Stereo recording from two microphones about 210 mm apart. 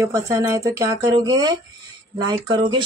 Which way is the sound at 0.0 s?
15° right (ahead or behind).